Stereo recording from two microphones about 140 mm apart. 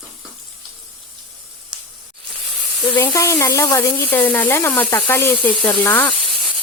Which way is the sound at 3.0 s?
20° left (ahead or behind).